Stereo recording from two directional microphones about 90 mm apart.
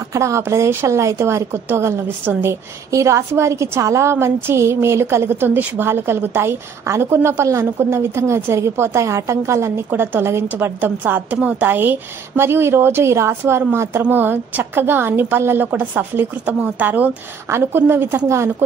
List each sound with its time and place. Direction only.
0.1 s a woman's voice: 30° right (ahead or behind)
17.5 s a woman's voice: 30° right (ahead or behind)